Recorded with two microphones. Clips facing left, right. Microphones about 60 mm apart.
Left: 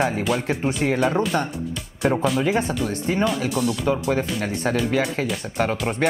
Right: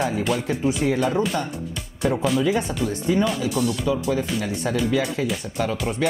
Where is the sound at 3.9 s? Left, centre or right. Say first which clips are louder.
Left 1 dB; left.